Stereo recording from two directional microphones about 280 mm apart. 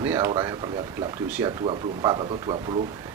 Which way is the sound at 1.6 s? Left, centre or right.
Centre.